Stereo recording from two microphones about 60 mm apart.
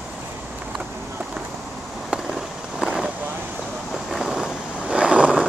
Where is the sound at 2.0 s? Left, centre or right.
Centre.